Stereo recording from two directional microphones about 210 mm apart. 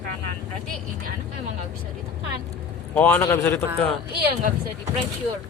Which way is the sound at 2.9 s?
10° left (ahead or behind).